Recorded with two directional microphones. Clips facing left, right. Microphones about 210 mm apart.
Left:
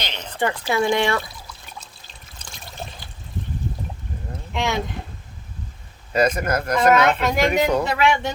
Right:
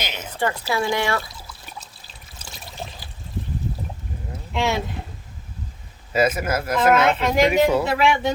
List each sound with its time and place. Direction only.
0.0 s a sound: 5° right (ahead or behind)
0.7 s speech: 20° left (ahead or behind)
1.4 s water: 5° right (ahead or behind)
2.4 s trickle: 5° right (ahead or behind)
4.5 s speech: 5° right (ahead or behind)
6.1 s speech: 5° right (ahead or behind)